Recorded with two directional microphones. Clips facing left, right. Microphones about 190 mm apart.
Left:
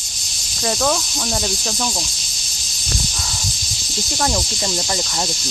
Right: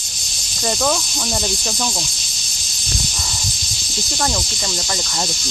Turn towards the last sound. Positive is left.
turn(degrees=5)  # may be behind; listen again after turning